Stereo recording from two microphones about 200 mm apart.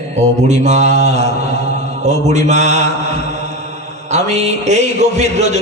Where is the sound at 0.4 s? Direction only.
35° right (ahead or behind).